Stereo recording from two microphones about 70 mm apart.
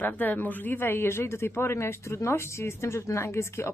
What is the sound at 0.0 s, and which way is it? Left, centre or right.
Speech, left.